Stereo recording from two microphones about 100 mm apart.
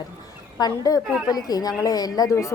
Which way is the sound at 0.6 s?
40° left (ahead or behind).